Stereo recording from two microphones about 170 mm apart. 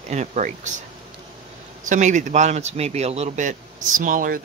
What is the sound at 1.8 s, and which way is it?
A man's voice, 45° right (ahead or behind).